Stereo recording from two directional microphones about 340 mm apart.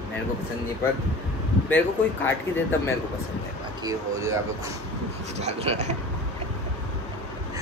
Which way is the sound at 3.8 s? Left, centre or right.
Centre.